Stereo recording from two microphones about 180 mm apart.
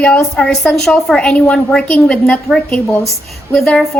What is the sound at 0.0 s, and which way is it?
A woman's voice, 5° left (ahead or behind).